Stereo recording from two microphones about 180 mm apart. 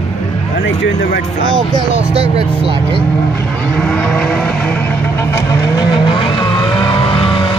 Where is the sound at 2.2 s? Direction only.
35° right (ahead or behind).